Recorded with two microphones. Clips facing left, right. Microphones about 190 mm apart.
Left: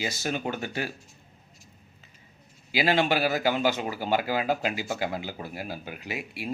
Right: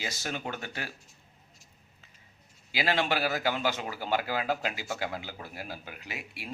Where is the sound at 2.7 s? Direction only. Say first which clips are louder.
Left 5 dB; 10° left (ahead or behind).